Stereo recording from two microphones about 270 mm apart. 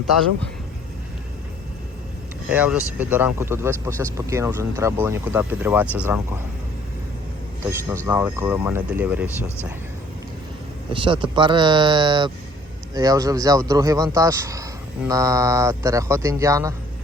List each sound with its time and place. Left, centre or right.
2.5 s speech: centre
7.6 s speech: centre
10.9 s speech: centre